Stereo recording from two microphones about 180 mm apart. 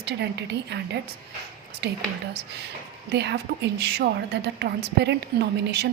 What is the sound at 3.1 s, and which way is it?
A woman's voice, 70° right (ahead or behind).